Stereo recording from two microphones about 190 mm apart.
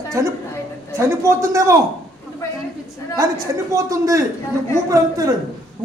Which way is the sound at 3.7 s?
15° right (ahead or behind).